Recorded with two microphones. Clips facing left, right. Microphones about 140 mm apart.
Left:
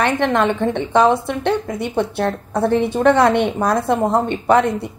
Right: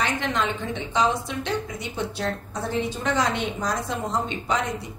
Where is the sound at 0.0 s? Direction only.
60° left (ahead or behind).